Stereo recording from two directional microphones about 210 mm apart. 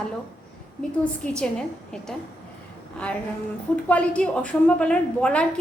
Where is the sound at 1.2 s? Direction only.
5° left (ahead or behind).